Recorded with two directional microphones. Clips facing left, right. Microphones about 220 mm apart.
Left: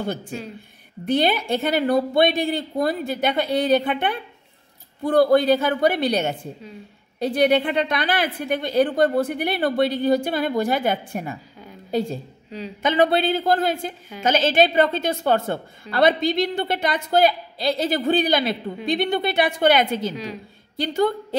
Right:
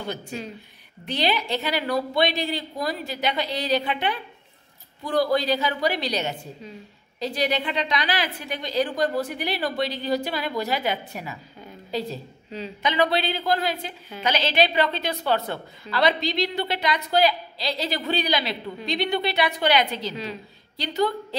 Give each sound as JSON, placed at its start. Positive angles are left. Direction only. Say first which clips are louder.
{"t": 1.0, "sound": "a woman's voice", "louder": "left 5 dB", "side_deg": 50}
{"t": 12.4, "sound": "a woman's voice", "louder": "left 1 dB", "side_deg": 10}
{"t": 12.8, "sound": "a woman's voice", "louder": "left 5 dB", "side_deg": 50}